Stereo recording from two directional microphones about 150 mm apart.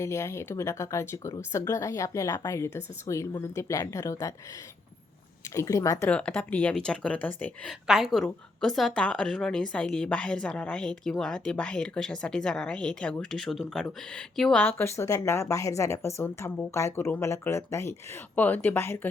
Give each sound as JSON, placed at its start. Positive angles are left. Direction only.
{"t": 0.0, "sound": "a woman's voice", "side_deg": 20}
{"t": 5.5, "sound": "a woman's voice", "side_deg": 20}
{"t": 6.1, "sound": "a woman's voice", "side_deg": 10}
{"t": 7.9, "sound": "a woman's voice", "side_deg": -5}